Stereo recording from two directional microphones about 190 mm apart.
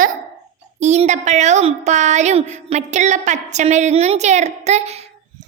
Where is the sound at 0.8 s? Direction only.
35° right (ahead or behind).